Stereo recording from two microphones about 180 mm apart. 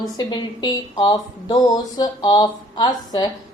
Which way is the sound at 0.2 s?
25° left (ahead or behind).